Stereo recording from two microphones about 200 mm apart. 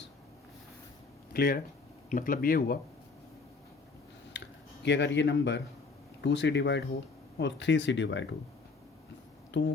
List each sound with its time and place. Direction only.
1.3 s speech: 50° left (ahead or behind)
4.4 s a sound: 60° left (ahead or behind)
6.2 s speech: 65° left (ahead or behind)
9.5 s speech: 65° left (ahead or behind)